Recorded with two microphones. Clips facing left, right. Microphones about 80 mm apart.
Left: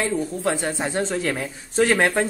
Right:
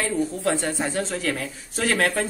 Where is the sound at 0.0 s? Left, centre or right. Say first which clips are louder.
Left 1 dB; centre.